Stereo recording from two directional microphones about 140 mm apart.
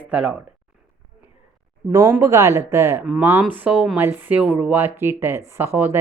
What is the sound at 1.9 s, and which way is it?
Speech, 25° right (ahead or behind).